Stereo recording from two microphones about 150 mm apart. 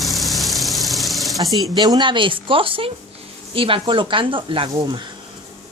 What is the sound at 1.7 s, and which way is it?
Speech, 25° right (ahead or behind).